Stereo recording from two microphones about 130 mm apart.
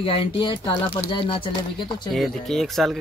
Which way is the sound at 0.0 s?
45° left (ahead or behind).